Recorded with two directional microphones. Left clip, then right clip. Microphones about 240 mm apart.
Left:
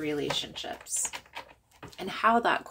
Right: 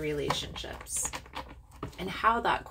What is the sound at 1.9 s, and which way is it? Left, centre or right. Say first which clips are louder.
Speech: left 2 dB; left.